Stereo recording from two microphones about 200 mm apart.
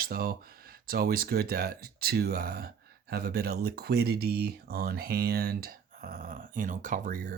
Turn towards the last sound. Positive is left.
turn(degrees=-45)  # may be behind; listen again after turning